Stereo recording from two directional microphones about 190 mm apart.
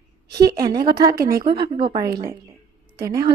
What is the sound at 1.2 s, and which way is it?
Speech, 50° right (ahead or behind).